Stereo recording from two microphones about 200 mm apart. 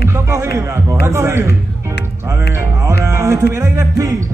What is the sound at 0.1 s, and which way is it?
Speech, 15° right (ahead or behind).